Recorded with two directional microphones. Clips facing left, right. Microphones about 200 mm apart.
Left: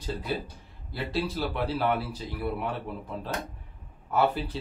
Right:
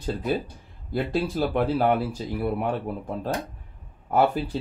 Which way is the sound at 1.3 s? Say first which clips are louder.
Right 6 dB; 50° right (ahead or behind).